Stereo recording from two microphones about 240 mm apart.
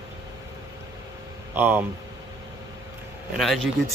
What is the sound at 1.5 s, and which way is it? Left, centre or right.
Speech, centre.